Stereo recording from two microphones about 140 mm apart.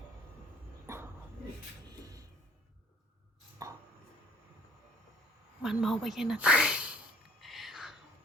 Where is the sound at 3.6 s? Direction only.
25° right (ahead or behind).